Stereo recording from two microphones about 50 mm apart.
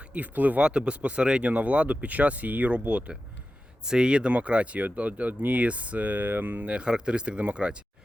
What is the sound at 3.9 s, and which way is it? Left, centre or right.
Speech, centre.